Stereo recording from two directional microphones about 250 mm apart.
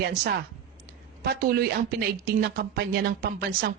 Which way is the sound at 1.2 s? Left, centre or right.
Right.